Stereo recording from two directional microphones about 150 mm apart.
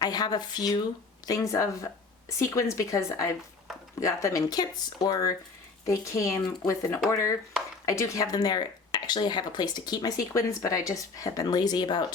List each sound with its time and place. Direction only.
0.0 s speech: 25° left (ahead or behind)